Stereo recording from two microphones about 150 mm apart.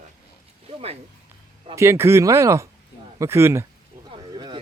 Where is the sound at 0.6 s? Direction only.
40° right (ahead or behind).